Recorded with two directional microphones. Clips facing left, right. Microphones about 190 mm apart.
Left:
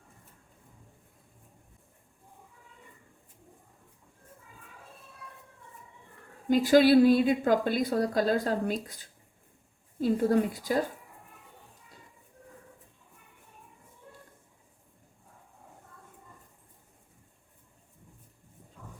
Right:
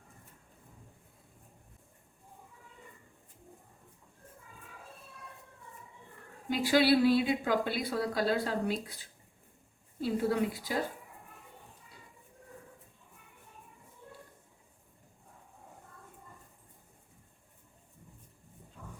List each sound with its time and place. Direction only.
6.5 s a woman's voice: 45° left (ahead or behind)